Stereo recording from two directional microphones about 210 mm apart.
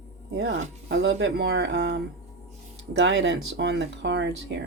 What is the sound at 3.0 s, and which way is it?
Speech, 60° right (ahead or behind).